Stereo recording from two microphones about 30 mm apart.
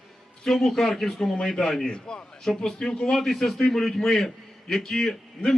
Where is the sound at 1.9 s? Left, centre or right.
Left.